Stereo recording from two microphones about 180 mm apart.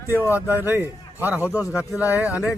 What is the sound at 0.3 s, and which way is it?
Speech, 10° right (ahead or behind).